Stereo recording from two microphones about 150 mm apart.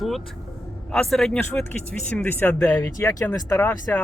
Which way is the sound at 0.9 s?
5° left (ahead or behind).